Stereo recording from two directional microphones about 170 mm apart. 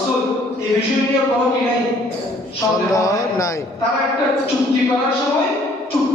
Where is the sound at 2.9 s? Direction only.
20° left (ahead or behind).